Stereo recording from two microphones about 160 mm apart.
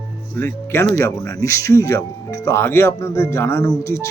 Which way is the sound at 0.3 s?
15° left (ahead or behind).